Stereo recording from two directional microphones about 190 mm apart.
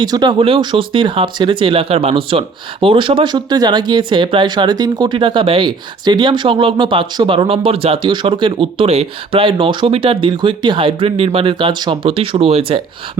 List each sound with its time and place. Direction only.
0.0 s speech: 20° right (ahead or behind)